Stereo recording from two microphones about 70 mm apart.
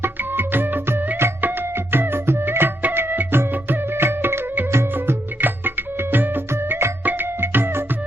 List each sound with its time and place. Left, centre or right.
0.0 s music: right